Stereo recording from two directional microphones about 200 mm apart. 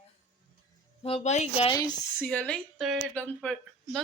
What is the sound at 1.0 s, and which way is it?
Speech, 30° left (ahead or behind).